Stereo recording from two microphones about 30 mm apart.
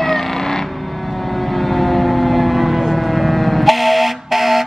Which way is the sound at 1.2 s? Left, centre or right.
Centre.